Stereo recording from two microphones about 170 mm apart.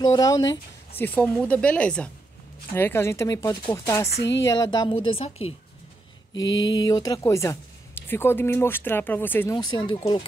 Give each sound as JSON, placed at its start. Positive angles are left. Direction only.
{"t": 0.0, "sound": "speech", "side_deg": 20}
{"t": 0.9, "sound": "speech", "side_deg": 10}
{"t": 4.2, "sound": "speech", "side_deg": 90}
{"t": 4.5, "sound": "a woman's voice", "side_deg": 20}
{"t": 6.4, "sound": "speech", "side_deg": 20}
{"t": 9.6, "sound": "speech", "side_deg": 25}